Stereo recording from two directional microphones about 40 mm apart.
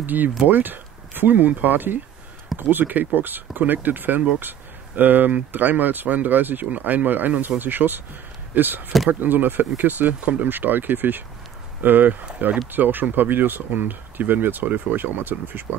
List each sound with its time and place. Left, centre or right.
0.0 s speech: right
10.5 s speech: right